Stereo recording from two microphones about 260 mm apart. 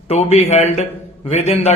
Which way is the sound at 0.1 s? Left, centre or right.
Left.